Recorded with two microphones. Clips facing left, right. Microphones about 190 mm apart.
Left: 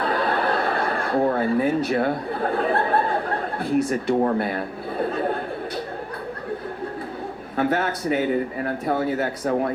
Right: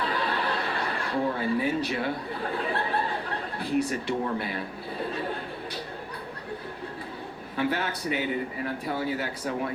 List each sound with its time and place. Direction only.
0.0 s chuckle: 50° left (ahead or behind)
4.2 s a man's voice: 55° left (ahead or behind)
7.5 s speech: 50° left (ahead or behind)